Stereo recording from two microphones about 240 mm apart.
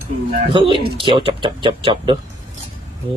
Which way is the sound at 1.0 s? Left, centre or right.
Right.